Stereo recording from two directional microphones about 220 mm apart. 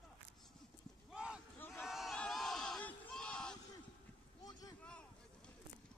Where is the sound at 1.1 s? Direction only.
5° right (ahead or behind).